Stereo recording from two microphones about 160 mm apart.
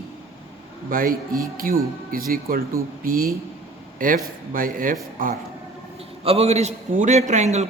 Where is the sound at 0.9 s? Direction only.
60° right (ahead or behind).